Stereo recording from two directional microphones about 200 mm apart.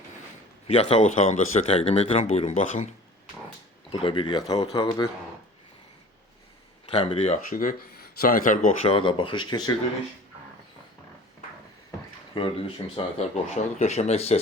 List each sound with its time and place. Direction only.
0.7 s speech: 30° left (ahead or behind)
3.9 s speech: 25° left (ahead or behind)
6.9 s speech: 30° left (ahead or behind)
7.5 s speech: 45° left (ahead or behind)
8.8 s speech: 25° left (ahead or behind)
12.3 s speech: 25° left (ahead or behind)